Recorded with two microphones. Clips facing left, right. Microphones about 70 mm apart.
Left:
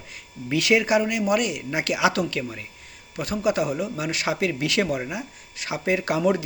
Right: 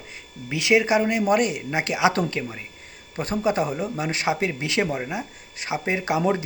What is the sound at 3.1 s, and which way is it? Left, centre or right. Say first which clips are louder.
Speech: even; right.